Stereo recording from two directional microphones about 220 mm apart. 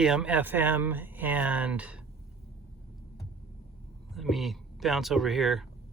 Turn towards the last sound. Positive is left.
turn(degrees=0)  # may be behind; listen again after turning